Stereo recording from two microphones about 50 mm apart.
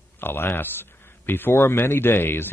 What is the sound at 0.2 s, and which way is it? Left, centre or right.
Speech, left.